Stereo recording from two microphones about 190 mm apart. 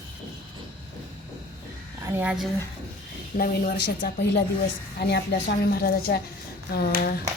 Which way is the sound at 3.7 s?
55° left (ahead or behind).